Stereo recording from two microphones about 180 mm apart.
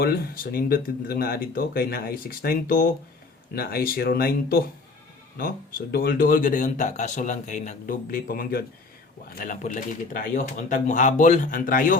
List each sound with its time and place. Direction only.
0.0 s speech: 55° left (ahead or behind)
5.9 s speech: 55° left (ahead or behind)